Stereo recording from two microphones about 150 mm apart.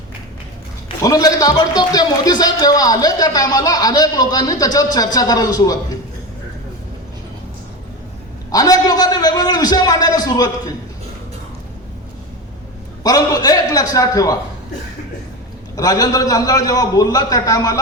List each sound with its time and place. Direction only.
1.0 s a man's voice: 25° left (ahead or behind)
8.4 s a man's voice: 25° left (ahead or behind)
13.0 s a man's voice: 25° left (ahead or behind)
15.7 s a man's voice: 25° left (ahead or behind)